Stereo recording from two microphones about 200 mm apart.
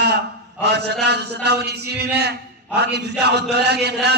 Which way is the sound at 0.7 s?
55° right (ahead or behind).